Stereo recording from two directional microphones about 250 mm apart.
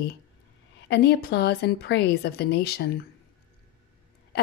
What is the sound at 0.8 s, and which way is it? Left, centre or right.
Speech, left.